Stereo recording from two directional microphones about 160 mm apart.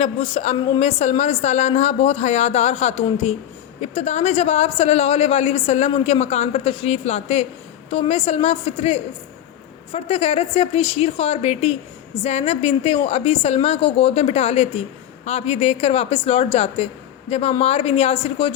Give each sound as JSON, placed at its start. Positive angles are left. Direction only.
{"t": 0.0, "sound": "a woman's voice", "side_deg": 45}